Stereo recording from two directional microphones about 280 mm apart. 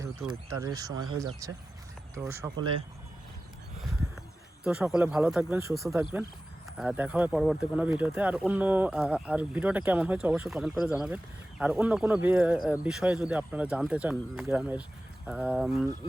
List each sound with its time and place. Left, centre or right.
0.0 s speech: centre
3.8 s a sound: centre
4.6 s speech: centre